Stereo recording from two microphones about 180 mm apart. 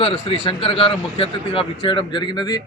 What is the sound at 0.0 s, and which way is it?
A man's voice, 30° left (ahead or behind).